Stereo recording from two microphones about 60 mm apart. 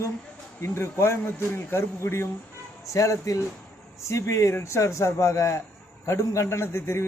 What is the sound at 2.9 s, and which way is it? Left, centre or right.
A man's voice, left.